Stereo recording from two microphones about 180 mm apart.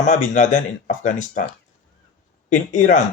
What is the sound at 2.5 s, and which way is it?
Speech, 45° left (ahead or behind).